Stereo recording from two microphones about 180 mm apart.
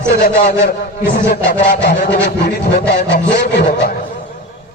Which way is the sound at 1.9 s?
75° left (ahead or behind).